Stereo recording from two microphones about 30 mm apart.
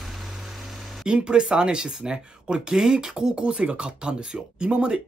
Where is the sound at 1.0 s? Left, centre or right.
Right.